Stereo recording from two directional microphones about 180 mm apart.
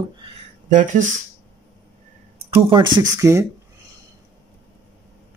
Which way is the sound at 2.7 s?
25° right (ahead or behind).